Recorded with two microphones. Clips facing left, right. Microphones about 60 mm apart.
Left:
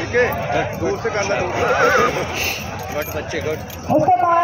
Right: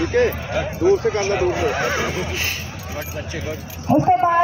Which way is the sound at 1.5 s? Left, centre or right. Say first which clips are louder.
Left 4 dB; left.